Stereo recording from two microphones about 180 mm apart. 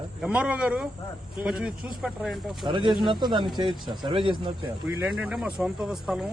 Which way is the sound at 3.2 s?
25° right (ahead or behind).